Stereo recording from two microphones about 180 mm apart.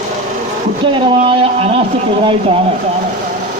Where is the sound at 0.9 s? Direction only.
30° right (ahead or behind).